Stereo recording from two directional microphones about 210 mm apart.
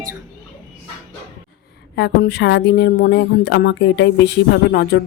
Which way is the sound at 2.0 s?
55° left (ahead or behind).